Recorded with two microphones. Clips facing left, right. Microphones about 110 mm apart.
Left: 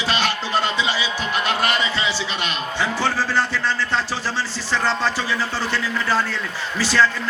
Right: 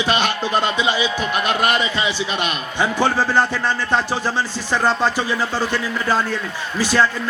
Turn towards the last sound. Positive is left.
turn(degrees=-15)  # may be behind; listen again after turning